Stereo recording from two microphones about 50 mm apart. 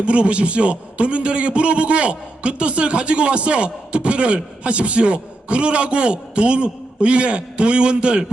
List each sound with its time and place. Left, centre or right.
0.0 s a man's voice: right